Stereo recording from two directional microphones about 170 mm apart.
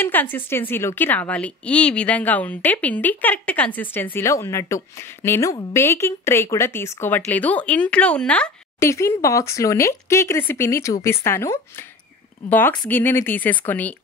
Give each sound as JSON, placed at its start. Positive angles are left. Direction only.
{"t": 0.0, "sound": "a woman's voice", "side_deg": 10}